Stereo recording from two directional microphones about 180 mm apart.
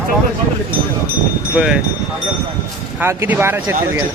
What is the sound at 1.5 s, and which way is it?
Speech, 5° right (ahead or behind).